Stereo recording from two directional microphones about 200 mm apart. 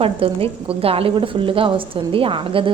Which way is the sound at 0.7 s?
30° right (ahead or behind).